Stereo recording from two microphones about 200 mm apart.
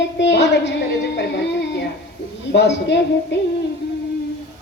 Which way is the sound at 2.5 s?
60° left (ahead or behind).